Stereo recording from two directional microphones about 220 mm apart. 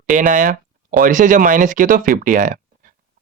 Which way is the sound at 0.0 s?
35° right (ahead or behind).